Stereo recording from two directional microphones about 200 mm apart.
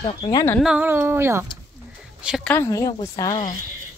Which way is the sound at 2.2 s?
Centre (ahead or behind).